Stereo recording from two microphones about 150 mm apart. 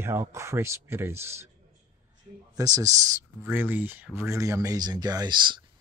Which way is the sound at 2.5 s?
25° right (ahead or behind).